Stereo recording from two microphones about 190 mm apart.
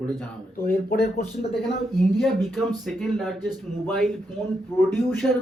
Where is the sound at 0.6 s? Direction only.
50° left (ahead or behind).